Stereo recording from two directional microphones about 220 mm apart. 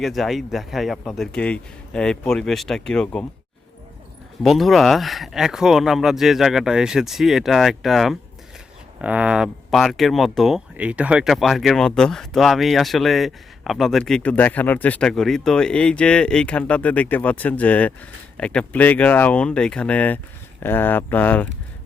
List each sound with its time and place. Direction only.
0.0 s speech: centre (ahead or behind)
4.4 s speech: centre (ahead or behind)